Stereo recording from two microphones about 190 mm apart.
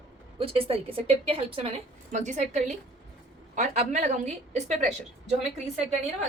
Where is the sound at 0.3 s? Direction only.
30° right (ahead or behind).